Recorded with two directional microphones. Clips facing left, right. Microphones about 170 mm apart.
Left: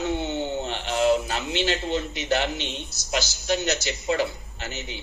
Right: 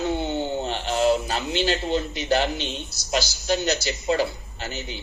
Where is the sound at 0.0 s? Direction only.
35° right (ahead or behind).